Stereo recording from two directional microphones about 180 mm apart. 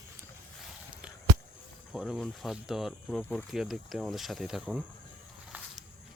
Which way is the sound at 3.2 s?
10° left (ahead or behind).